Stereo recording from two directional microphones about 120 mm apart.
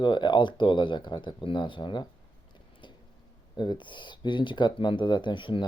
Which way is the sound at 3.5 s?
40° left (ahead or behind).